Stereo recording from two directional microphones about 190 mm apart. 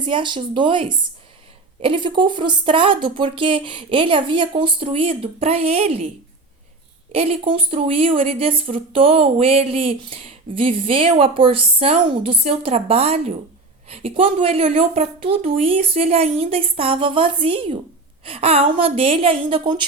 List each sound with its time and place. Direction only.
0.0 s speech: 25° right (ahead or behind)
7.1 s a woman's voice: 30° right (ahead or behind)